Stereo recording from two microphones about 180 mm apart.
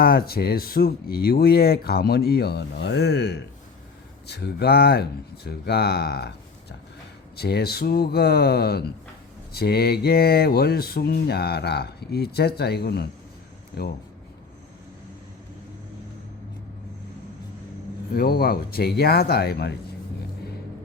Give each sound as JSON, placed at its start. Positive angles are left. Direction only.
{"t": 0.0, "sound": "speech", "side_deg": 55}
{"t": 18.1, "sound": "speech", "side_deg": 55}